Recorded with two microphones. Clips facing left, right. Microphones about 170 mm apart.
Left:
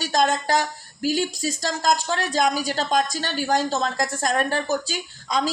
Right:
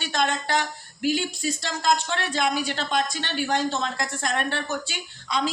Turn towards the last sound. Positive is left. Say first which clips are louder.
# left 3 dB
turn(degrees=40)  # may be behind; listen again after turning